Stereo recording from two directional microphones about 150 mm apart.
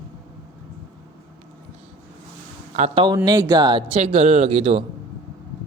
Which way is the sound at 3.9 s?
40° right (ahead or behind).